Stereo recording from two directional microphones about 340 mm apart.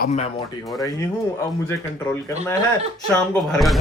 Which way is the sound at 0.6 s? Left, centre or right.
Centre.